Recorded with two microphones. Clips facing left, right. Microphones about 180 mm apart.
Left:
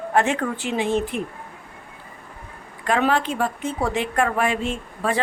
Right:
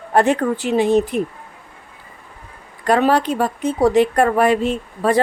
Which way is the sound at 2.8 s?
40° right (ahead or behind).